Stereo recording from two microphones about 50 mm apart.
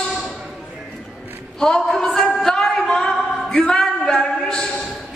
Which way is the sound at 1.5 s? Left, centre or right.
Centre.